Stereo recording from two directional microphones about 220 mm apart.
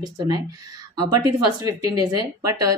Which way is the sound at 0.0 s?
20° right (ahead or behind).